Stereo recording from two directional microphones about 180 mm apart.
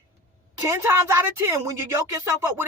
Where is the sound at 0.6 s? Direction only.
15° right (ahead or behind).